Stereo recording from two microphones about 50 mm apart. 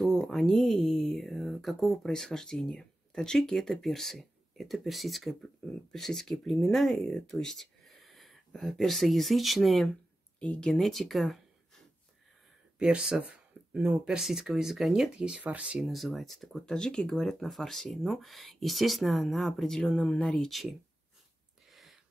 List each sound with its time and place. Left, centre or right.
0.0 s speech: centre
12.7 s speech: centre
14.0 s speech: centre
15.1 s speech: centre
15.8 s speech: centre
17.2 s speech: centre
20.0 s speech: left
20.2 s speech: centre
21.6 s a sound: centre